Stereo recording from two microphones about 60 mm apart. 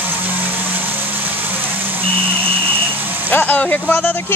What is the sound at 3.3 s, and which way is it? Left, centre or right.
Speech, left.